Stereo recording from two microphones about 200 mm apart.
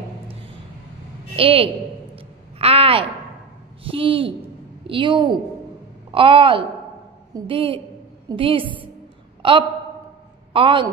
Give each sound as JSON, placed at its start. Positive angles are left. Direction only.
{"t": 1.3, "sound": "speech", "side_deg": -25}
{"t": 2.1, "sound": "a sound", "side_deg": -30}
{"t": 3.8, "sound": "a woman's voice", "side_deg": -25}